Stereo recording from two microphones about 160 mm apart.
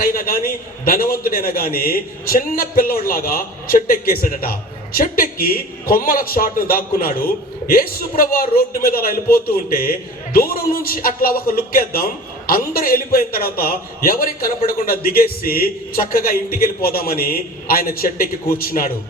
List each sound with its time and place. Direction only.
0.0 s a man's voice: 65° left (ahead or behind)